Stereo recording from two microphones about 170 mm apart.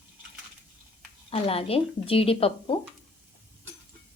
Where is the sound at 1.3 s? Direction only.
35° left (ahead or behind).